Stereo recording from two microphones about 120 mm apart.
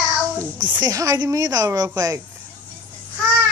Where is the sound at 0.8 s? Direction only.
30° right (ahead or behind).